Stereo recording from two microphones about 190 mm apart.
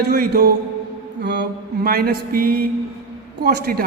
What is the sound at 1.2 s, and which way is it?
A man's voice, 65° right (ahead or behind).